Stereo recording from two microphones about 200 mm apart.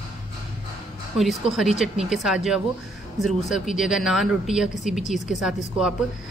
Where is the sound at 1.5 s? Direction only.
Centre (ahead or behind).